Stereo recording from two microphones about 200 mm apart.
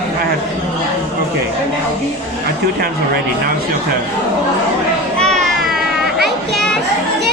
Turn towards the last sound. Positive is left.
turn(degrees=0)  # may be behind; listen again after turning